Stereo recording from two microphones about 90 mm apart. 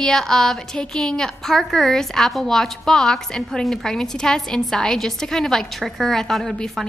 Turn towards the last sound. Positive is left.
turn(degrees=0)  # may be behind; listen again after turning